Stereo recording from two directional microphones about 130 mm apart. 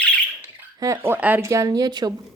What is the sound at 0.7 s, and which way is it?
Speech, 20° right (ahead or behind).